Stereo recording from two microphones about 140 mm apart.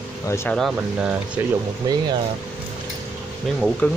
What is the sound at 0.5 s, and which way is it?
Speech, 5° right (ahead or behind).